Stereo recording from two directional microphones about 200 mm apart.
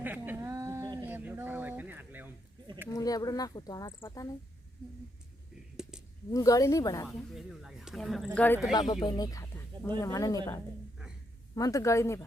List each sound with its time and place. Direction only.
0.0 s a sound: 10° right (ahead or behind)
2.9 s speech: 20° left (ahead or behind)
6.3 s speech: 15° left (ahead or behind)
7.3 s speech: centre (ahead or behind)